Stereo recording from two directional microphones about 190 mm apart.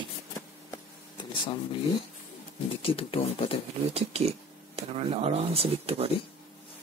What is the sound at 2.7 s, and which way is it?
Speech, 30° left (ahead or behind).